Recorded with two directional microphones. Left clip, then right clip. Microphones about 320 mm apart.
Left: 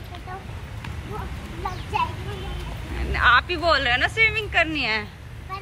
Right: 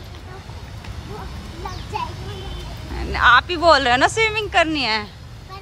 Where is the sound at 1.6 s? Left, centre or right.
Centre.